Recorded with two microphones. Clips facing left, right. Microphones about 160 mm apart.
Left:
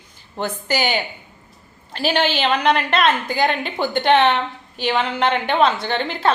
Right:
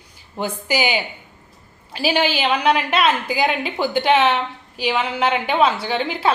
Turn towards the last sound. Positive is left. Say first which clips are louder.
# even
turn(degrees=-5)  # may be behind; listen again after turning